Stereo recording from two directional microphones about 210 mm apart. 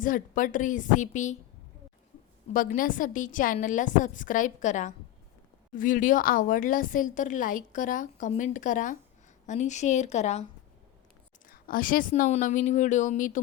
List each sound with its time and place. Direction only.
0.0 s a woman's voice: 40° left (ahead or behind)
2.5 s a woman's voice: 40° left (ahead or behind)
11.4 s a woman's voice: 40° left (ahead or behind)